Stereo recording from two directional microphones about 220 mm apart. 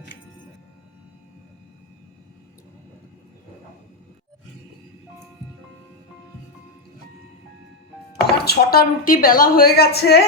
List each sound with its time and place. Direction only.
8.1 s speech: 45° left (ahead or behind)